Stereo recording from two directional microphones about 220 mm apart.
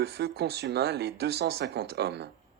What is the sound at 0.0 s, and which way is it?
Speech, 45° right (ahead or behind).